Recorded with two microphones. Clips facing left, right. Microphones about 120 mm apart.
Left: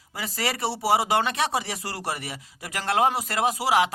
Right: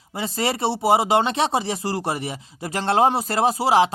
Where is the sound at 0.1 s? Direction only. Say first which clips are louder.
Right 5 dB; 25° right (ahead or behind).